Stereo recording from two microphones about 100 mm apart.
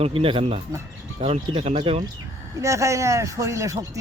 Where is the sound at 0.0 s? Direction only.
70° right (ahead or behind).